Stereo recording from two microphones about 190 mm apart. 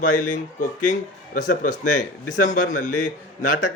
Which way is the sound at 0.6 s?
45° left (ahead or behind).